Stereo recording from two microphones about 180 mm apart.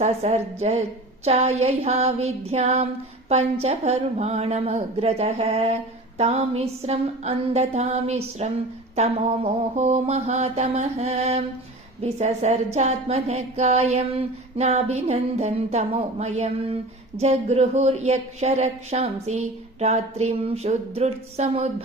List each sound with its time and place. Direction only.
0.0 s a woman's voice: 40° right (ahead or behind)